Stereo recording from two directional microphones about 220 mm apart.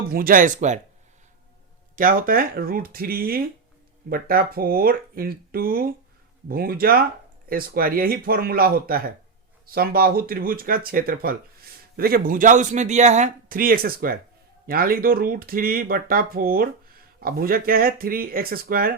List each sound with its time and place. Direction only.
0.1 s speech: 40° right (ahead or behind)
2.0 s speech: 40° right (ahead or behind)